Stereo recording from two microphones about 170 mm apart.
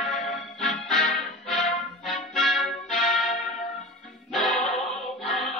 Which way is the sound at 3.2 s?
55° left (ahead or behind).